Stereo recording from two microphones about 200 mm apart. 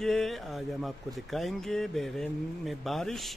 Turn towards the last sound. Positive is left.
turn(degrees=0)  # may be behind; listen again after turning